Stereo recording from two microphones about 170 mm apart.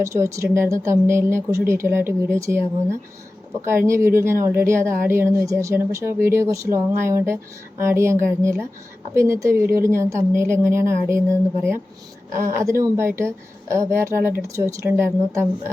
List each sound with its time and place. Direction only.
0.0 s speech: 15° right (ahead or behind)
3.6 s speech: 15° right (ahead or behind)
12.4 s speech: 15° right (ahead or behind)